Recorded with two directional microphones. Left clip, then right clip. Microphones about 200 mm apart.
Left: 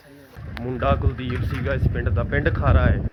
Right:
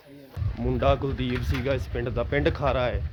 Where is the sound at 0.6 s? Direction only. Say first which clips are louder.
Even; 5° right (ahead or behind).